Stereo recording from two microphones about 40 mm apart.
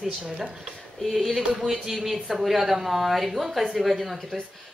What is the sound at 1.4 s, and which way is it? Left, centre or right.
Speech, right.